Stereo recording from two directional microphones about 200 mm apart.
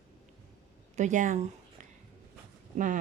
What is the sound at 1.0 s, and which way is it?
Speech, 40° right (ahead or behind).